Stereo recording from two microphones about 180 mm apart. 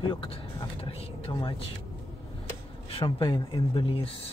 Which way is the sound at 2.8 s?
30° left (ahead or behind).